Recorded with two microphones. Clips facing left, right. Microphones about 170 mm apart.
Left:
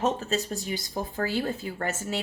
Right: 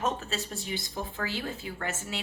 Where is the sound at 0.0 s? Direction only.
40° left (ahead or behind).